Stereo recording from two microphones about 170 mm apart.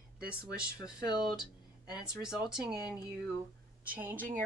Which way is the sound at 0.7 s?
25° left (ahead or behind).